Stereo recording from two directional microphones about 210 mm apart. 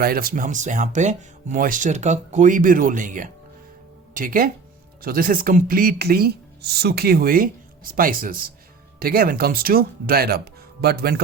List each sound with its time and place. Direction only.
0.0 s speech: 45° right (ahead or behind)